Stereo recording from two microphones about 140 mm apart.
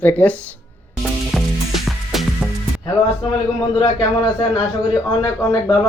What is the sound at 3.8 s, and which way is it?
Speech, 35° left (ahead or behind).